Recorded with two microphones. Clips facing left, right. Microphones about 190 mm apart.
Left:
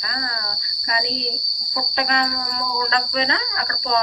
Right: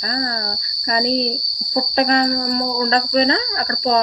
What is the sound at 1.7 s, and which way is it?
Cricket, 40° right (ahead or behind).